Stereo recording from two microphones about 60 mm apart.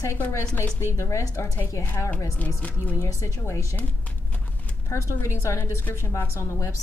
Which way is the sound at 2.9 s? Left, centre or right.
Left.